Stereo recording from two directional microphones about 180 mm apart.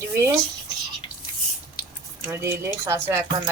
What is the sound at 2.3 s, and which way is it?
Speech, 15° right (ahead or behind).